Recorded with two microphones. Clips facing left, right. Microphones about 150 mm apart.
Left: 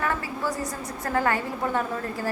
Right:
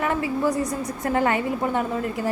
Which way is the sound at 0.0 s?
20° right (ahead or behind).